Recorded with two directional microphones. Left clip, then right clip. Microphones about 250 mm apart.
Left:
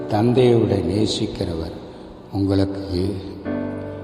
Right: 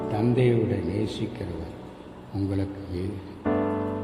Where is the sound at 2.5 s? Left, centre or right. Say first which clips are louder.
Left 12 dB; left.